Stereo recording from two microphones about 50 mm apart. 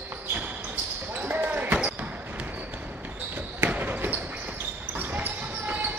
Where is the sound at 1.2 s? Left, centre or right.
Right.